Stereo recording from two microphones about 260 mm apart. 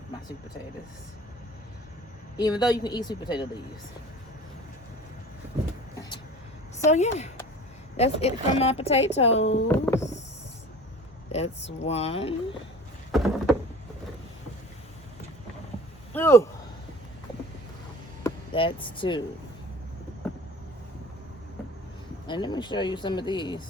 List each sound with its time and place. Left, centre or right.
2.4 s speech: centre
6.9 s speech: left
9.6 s a sound: centre
11.3 s speech: left
13.1 s a sound: centre
16.1 s speech: centre
18.2 s speech: centre
22.3 s speech: centre